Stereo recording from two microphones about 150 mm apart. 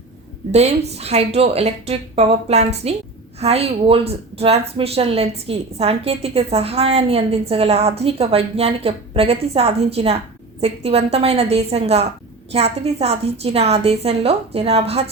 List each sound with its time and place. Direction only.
0.5 s a woman's voice: 45° right (ahead or behind)